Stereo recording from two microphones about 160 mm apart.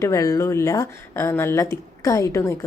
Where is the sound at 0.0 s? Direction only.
20° left (ahead or behind).